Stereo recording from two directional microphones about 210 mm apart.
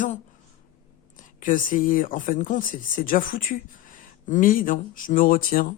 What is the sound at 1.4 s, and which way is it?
Speech, 40° left (ahead or behind).